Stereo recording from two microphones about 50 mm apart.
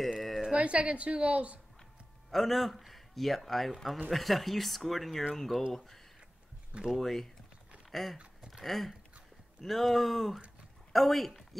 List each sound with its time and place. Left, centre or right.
0.6 s a woman's voice: right
2.3 s a man's voice: centre
6.7 s speech: centre
7.0 s a man's voice: centre
8.5 s a sound: centre
9.6 s a man's voice: centre